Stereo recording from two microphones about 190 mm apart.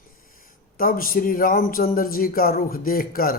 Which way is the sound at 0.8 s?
50° left (ahead or behind).